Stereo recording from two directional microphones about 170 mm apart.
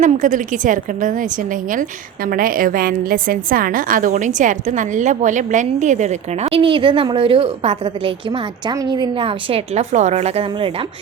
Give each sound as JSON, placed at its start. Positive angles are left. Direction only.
{"t": 0.0, "sound": "a woman's voice", "side_deg": -50}